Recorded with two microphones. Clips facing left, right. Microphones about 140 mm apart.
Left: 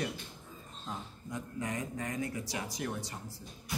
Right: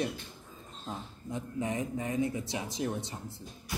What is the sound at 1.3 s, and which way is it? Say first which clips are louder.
Speech: right 4 dB; 25° right (ahead or behind).